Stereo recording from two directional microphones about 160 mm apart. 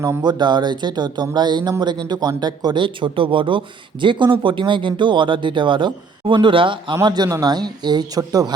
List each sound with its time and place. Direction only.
0.0 s speech: 25° right (ahead or behind)